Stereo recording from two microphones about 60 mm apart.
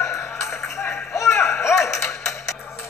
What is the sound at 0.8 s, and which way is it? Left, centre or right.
Whip, left.